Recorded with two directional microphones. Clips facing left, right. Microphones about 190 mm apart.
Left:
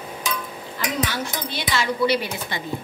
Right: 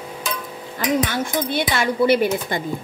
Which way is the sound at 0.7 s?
50° right (ahead or behind).